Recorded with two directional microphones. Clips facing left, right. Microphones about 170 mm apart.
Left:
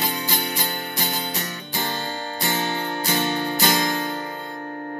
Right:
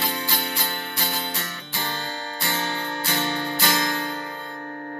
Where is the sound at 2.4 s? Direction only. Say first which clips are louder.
Left 3 dB; 15° left (ahead or behind).